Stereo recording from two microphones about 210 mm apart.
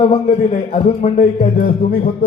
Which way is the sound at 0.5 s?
35° left (ahead or behind).